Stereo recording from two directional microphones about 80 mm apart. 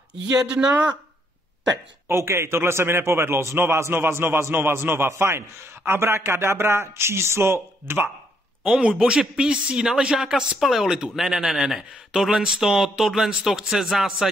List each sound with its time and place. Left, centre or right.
0.4 s speech: centre
2.0 s a man's voice: right
8.6 s speech: centre